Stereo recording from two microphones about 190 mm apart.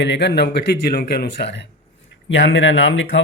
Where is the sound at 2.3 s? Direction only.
75° left (ahead or behind).